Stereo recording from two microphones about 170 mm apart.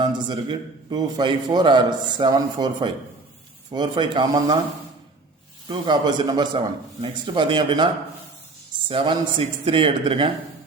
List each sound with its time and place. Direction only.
0.0 s a man's voice: 25° right (ahead or behind)
5.6 s a man's voice: 25° right (ahead or behind)
8.9 s speech: 30° right (ahead or behind)